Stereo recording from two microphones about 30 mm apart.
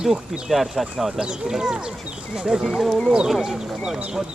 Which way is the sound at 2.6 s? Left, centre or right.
Centre.